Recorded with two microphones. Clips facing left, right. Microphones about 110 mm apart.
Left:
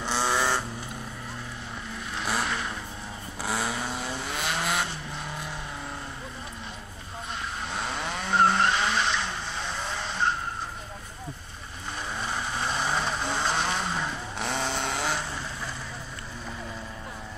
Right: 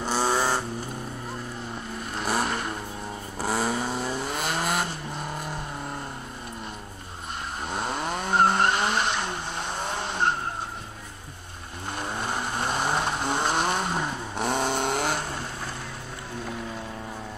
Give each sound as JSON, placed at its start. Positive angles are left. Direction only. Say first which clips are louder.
{"t": 0.0, "sound": "vehicle", "louder": "right 2 dB", "side_deg": -40}
{"t": 2.1, "sound": "vehicle", "louder": "right 3 dB", "side_deg": -45}
{"t": 7.7, "sound": "vehicle", "louder": "right 4 dB", "side_deg": -45}
{"t": 12.0, "sound": "vehicle", "louder": "right 2 dB", "side_deg": -55}